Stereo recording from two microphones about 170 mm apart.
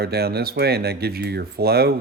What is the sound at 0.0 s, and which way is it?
Speech, 70° right (ahead or behind).